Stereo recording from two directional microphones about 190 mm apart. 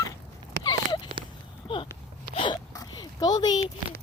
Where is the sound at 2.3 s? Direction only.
20° left (ahead or behind).